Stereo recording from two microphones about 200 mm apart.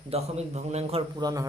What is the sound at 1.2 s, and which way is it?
Speech, 20° right (ahead or behind).